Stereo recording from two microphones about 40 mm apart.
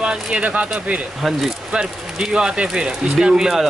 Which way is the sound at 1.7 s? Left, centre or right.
Right.